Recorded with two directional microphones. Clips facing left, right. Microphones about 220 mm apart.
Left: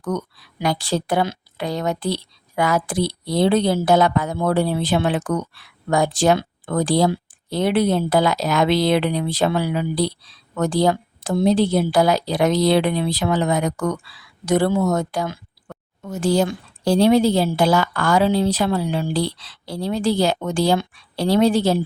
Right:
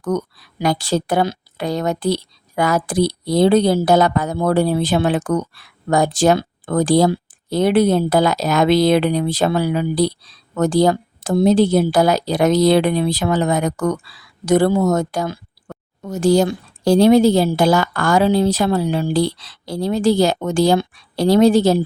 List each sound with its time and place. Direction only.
0.6 s speech: 45° right (ahead or behind)